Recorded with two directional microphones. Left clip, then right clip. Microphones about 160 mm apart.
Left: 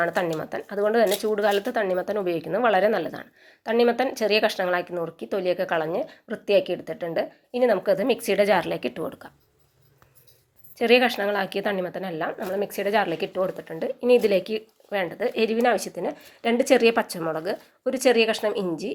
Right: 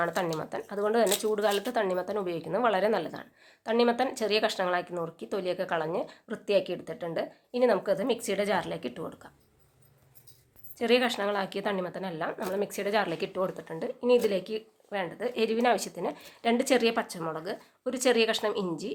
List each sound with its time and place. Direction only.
0.0 s a woman's voice: 15° left (ahead or behind)
10.8 s a woman's voice: 20° left (ahead or behind)
12.3 s a woman's voice: 5° left (ahead or behind)